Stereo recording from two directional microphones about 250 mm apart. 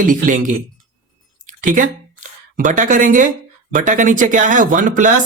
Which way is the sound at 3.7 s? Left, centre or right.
Right.